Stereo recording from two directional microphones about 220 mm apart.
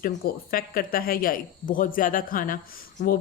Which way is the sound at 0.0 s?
40° left (ahead or behind).